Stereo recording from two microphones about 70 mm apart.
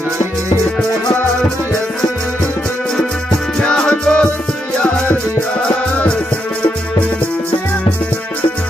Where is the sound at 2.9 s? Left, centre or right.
Centre.